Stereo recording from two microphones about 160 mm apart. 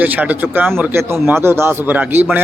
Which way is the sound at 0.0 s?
10° right (ahead or behind).